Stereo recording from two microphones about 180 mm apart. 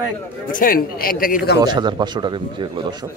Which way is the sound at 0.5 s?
50° left (ahead or behind).